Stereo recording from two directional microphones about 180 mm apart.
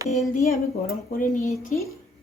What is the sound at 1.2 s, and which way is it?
Speech, 40° left (ahead or behind).